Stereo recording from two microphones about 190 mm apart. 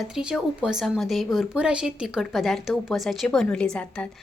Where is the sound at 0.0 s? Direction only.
5° right (ahead or behind).